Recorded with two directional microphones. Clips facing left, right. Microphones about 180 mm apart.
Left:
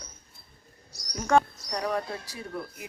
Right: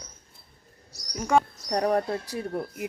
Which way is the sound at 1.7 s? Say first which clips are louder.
Right 6 dB; 45° right (ahead or behind).